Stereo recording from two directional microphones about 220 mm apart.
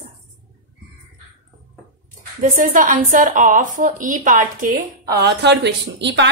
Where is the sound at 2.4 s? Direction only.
35° right (ahead or behind); by 6.3 s 55° right (ahead or behind).